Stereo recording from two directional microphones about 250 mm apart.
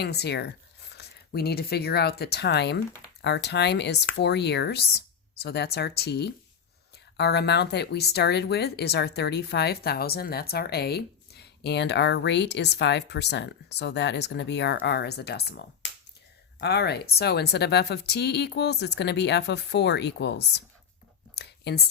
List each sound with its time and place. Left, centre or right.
0.0 s speech: left
21.3 s whispering: left